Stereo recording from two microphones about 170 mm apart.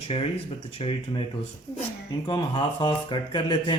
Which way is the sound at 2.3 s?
25° left (ahead or behind).